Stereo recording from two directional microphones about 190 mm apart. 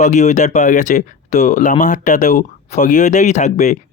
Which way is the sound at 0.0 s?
40° left (ahead or behind).